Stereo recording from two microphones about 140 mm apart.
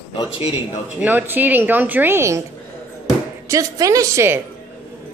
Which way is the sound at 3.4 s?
25° right (ahead or behind).